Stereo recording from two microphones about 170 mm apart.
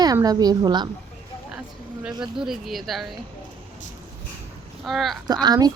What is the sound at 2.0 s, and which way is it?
Speech, 5° right (ahead or behind).